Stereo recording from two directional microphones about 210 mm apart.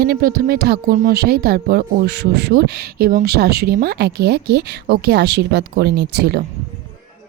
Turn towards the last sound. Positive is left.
turn(degrees=-50)  # may be behind; listen again after turning